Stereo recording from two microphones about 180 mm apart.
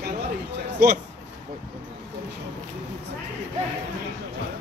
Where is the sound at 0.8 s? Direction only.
55° right (ahead or behind).